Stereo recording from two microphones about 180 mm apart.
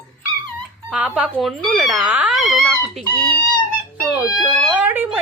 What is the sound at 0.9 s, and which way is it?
Speech, 5° right (ahead or behind).